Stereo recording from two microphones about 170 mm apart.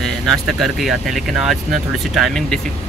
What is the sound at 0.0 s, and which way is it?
Speech, centre (ahead or behind).